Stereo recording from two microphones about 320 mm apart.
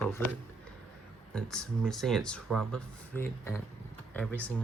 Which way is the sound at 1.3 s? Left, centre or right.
Centre.